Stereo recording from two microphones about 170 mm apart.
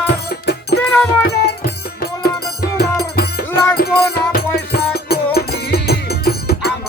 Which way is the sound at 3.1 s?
65° left (ahead or behind).